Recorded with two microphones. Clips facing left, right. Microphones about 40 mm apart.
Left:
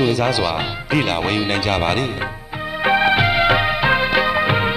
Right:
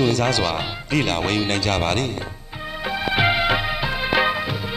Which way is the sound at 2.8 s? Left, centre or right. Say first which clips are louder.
Left 10 dB; left.